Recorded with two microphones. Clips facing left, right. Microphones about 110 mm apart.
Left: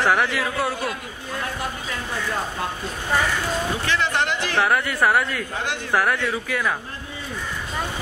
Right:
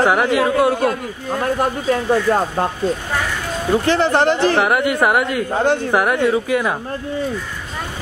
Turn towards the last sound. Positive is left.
turn(degrees=-25)  # may be behind; listen again after turning